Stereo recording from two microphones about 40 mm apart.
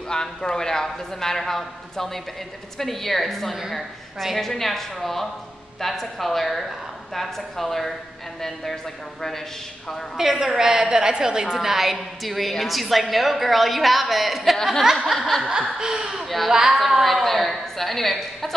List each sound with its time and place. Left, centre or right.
0.1 s a man's voice: centre
10.1 s a woman's voice: centre
14.9 s a woman's voice: centre
15.1 s a woman's voice: centre
15.4 s speech: centre
16.3 s a woman's voice: centre